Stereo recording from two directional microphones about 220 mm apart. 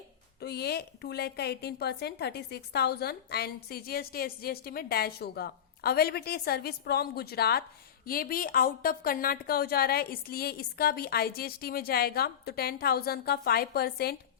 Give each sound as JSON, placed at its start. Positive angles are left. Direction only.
{"t": 0.3, "sound": "a woman's voice", "side_deg": 45}